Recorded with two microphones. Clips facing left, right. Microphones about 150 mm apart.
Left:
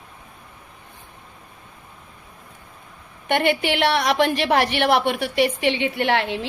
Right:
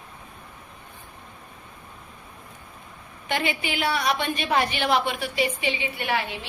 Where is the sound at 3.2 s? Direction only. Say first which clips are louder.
Left 7 dB; 65° left (ahead or behind).